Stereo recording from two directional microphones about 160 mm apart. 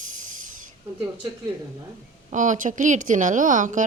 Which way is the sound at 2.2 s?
50° right (ahead or behind).